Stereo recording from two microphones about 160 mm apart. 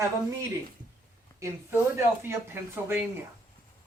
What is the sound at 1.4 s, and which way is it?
Speech, 15° right (ahead or behind).